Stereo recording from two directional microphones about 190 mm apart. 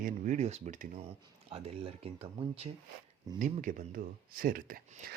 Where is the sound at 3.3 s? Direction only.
45° right (ahead or behind).